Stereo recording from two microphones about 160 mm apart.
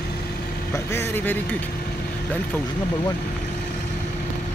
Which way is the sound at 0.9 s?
15° left (ahead or behind).